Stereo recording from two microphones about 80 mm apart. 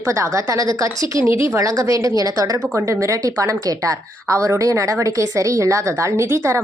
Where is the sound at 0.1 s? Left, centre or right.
Right.